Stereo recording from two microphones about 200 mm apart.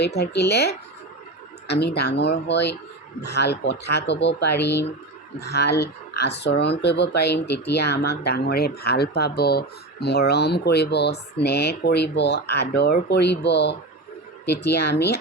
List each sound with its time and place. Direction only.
0.0 s speech: 55° left (ahead or behind)